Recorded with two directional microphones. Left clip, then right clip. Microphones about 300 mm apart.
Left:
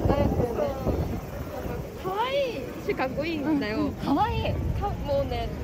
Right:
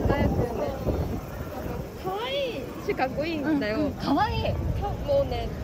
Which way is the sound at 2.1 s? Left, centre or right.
Centre.